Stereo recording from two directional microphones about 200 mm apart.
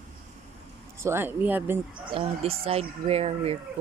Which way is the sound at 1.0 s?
10° right (ahead or behind).